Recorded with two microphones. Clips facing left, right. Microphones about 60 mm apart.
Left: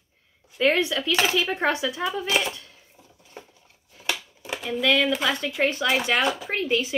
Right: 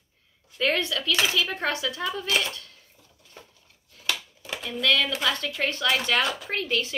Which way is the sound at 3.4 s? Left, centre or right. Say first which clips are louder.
Left 5 dB; left.